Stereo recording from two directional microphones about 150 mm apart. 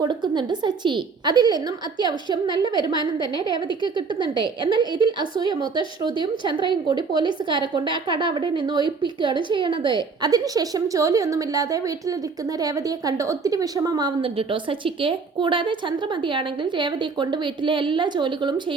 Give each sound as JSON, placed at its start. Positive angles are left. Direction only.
{"t": 0.0, "sound": "a woman's voice", "side_deg": -30}
{"t": 4.2, "sound": "a woman's voice", "side_deg": -30}
{"t": 14.2, "sound": "speech", "side_deg": -35}